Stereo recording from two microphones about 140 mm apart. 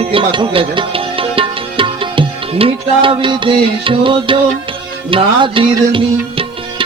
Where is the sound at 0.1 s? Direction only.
35° right (ahead or behind).